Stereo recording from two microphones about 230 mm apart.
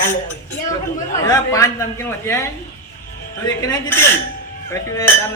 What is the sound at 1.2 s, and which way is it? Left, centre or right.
A man's voice, centre.